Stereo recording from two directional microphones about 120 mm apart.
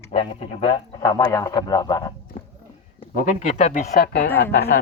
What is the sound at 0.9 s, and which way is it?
A man's voice, 35° left (ahead or behind).